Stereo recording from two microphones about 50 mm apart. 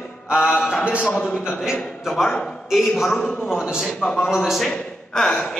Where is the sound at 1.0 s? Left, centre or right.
Left.